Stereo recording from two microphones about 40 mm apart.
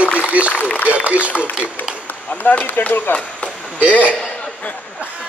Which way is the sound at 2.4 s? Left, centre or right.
Left.